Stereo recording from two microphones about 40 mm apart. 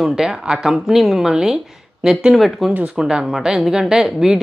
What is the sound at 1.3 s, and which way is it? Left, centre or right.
Speech, centre.